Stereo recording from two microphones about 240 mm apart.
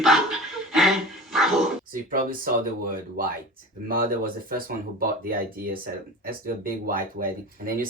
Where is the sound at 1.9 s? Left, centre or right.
Right.